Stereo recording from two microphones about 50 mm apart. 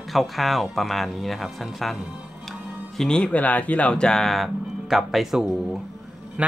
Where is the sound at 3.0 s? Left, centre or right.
Centre.